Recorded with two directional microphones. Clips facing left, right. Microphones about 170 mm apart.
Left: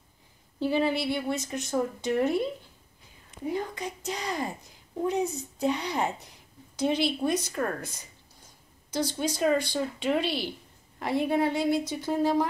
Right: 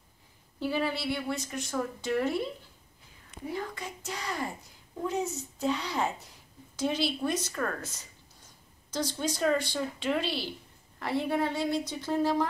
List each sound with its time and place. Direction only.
0.6 s speech: 20° left (ahead or behind)
3.4 s a woman's voice: 20° left (ahead or behind)
9.2 s a woman's voice: 15° left (ahead or behind)